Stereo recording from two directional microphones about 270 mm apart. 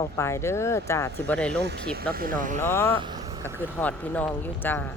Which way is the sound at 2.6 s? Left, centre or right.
Centre.